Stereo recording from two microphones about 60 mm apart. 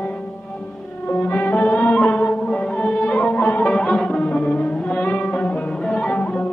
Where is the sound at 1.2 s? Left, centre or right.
Left.